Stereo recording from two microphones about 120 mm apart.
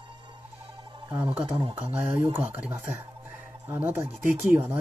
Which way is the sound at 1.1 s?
15° right (ahead or behind).